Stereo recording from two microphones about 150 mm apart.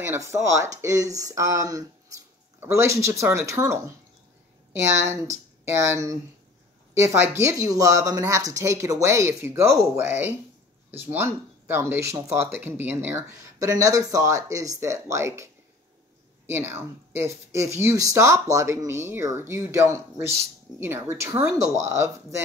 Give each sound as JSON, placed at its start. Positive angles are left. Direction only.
{"t": 0.0, "sound": "speech", "side_deg": -15}
{"t": 4.8, "sound": "speech", "side_deg": -20}